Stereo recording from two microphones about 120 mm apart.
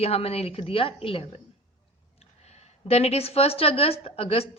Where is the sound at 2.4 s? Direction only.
65° left (ahead or behind).